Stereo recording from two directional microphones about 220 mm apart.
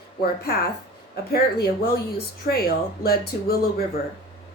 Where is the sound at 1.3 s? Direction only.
45° left (ahead or behind).